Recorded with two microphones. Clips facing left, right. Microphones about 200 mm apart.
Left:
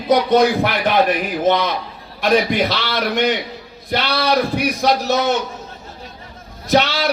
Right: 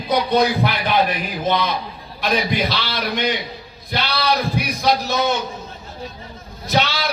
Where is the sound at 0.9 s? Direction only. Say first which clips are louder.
Left 3 dB; 50° left (ahead or behind).